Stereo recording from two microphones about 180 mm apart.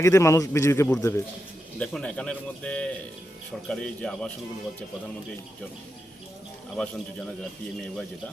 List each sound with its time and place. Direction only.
0.0 s a man's voice: 15° left (ahead or behind)
6.7 s a man's voice: 5° left (ahead or behind)